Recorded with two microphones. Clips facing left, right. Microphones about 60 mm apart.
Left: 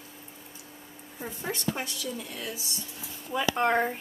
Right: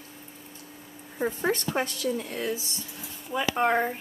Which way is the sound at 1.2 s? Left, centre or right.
Right.